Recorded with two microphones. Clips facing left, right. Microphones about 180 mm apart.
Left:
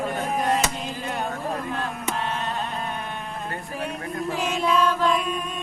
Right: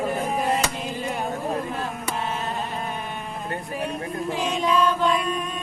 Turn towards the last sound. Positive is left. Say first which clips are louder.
# even
turn(degrees=0)  # may be behind; listen again after turning